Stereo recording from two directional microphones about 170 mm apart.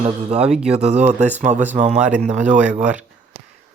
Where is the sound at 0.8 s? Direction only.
40° right (ahead or behind).